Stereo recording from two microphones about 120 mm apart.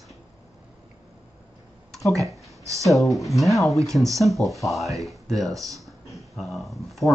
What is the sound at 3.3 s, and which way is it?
Speech, centre (ahead or behind).